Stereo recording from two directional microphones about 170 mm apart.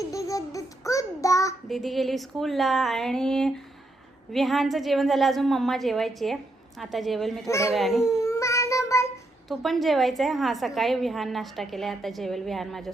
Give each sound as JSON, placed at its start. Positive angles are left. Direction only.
{"t": 0.0, "sound": "child singing", "side_deg": 20}
{"t": 1.6, "sound": "a woman's voice", "side_deg": 0}
{"t": 7.4, "sound": "a child's voice", "side_deg": 15}
{"t": 7.7, "sound": "a woman's voice", "side_deg": 0}
{"t": 8.0, "sound": "child singing", "side_deg": 15}
{"t": 9.5, "sound": "a woman's voice", "side_deg": 0}